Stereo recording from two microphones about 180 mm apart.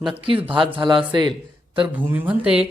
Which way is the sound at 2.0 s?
10° right (ahead or behind).